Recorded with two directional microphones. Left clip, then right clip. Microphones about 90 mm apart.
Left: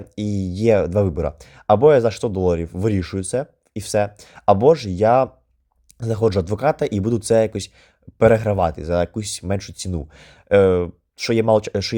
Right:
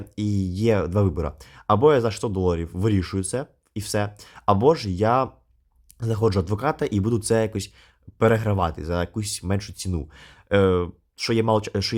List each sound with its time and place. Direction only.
0.2 s speech: 25° left (ahead or behind)